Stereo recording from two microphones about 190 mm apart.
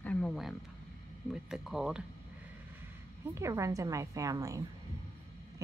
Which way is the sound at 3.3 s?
15° right (ahead or behind).